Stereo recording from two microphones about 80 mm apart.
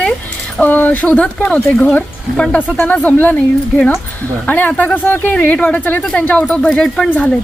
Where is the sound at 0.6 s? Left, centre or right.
Left.